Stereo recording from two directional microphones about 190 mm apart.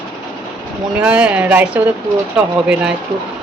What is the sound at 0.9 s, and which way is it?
A woman's voice, 5° right (ahead or behind).